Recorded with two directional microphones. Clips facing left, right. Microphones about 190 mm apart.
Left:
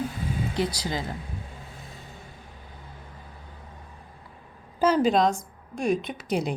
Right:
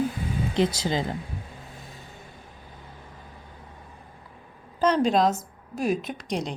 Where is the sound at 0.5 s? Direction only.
25° right (ahead or behind).